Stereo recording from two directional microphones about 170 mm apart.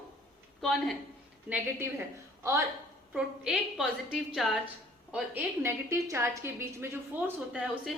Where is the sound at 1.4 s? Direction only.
10° right (ahead or behind).